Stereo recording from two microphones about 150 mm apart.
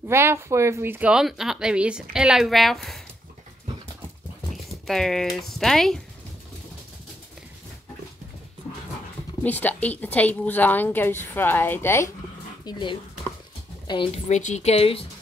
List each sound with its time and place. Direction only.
0.1 s speech: 15° right (ahead or behind); by 3.0 s centre (ahead or behind)
4.5 s speech: centre (ahead or behind)
9.4 s a woman's voice: 10° left (ahead or behind)
12.6 s a woman's voice: 30° left (ahead or behind)